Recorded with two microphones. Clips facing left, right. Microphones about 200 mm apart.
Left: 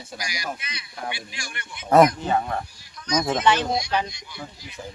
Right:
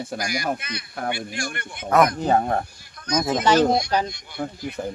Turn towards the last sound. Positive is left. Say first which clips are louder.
# right 9 dB
turn(degrees=-55)  # may be behind; listen again after turning